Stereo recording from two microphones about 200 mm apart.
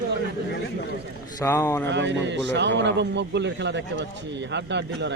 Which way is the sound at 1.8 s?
60° right (ahead or behind).